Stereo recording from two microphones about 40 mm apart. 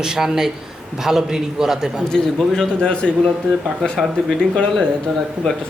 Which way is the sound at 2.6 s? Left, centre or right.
Left.